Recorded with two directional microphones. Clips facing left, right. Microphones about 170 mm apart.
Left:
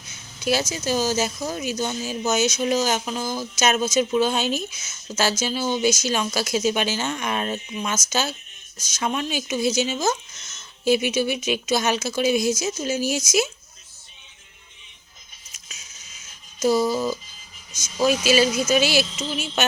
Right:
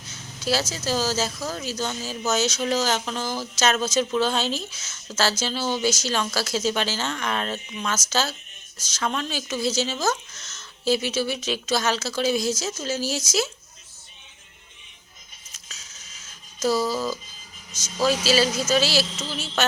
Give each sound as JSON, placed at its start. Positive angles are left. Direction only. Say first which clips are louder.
{"t": 0.1, "sound": "a sound", "louder": "left 2 dB", "side_deg": 15}
{"t": 0.7, "sound": "speech", "louder": "left 2 dB", "side_deg": 15}
{"t": 16.6, "sound": "speech", "louder": "left 3 dB", "side_deg": 20}
{"t": 18.3, "sound": "speech", "louder": "left 2 dB", "side_deg": 15}